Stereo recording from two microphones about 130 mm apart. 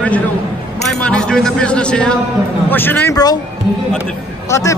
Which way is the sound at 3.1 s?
30° left (ahead or behind).